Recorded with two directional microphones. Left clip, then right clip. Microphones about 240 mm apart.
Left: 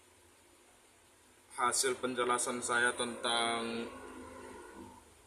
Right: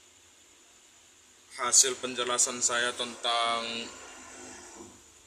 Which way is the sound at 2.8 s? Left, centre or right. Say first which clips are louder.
Right 2 dB; left.